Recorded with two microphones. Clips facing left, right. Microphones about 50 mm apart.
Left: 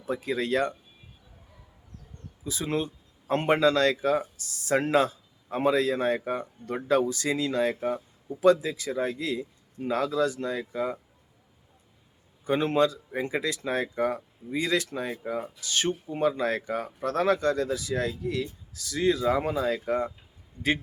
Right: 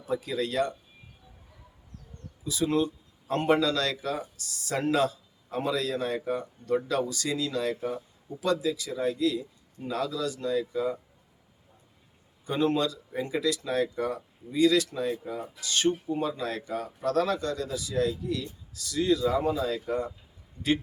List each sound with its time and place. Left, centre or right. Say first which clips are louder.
0.0 s speech: left 1 dB; left
2.4 s speech: right 3 dB; left
12.5 s speech: left 3 dB; left